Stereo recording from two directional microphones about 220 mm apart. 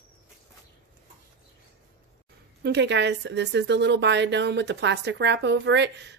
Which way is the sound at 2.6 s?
50° right (ahead or behind).